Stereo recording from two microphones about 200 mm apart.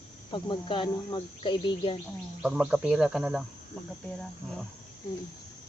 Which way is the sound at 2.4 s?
5° right (ahead or behind).